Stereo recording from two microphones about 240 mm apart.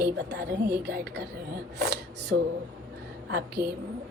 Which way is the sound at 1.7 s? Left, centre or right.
Right.